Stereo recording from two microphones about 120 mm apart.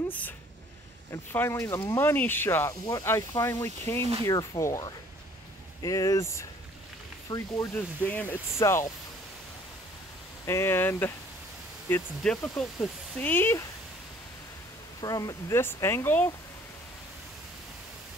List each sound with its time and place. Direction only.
1.1 s speech: 20° left (ahead or behind)
7.7 s speech: 15° left (ahead or behind)
10.4 s speech: 20° left (ahead or behind)
12.2 s speech: 5° left (ahead or behind)
13.2 s speech: 15° left (ahead or behind)
15.0 s speech: 30° left (ahead or behind)